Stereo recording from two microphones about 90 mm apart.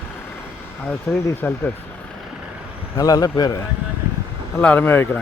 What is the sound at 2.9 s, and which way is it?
Speech, 45° left (ahead or behind).